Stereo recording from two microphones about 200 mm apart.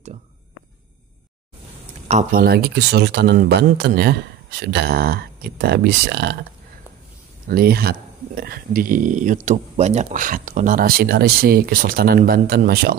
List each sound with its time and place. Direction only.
2.0 s speech: 35° right (ahead or behind)
2.4 s speech: 55° right (ahead or behind)
7.4 s speech: 50° right (ahead or behind)